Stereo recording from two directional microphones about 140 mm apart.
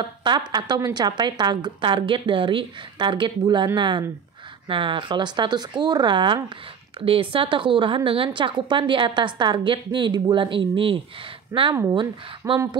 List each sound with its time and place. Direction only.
0.0 s a woman's voice: 35° right (ahead or behind)
11.5 s speech: 20° right (ahead or behind)
11.9 s a woman's voice: 35° right (ahead or behind)